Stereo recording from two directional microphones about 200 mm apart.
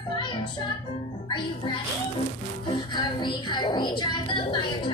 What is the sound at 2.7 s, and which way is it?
A woman's voice, 20° left (ahead or behind).